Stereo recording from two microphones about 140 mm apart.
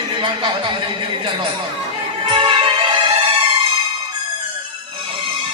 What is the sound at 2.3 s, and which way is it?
Music, 35° right (ahead or behind).